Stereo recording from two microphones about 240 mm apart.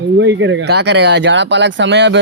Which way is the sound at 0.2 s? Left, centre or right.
Right.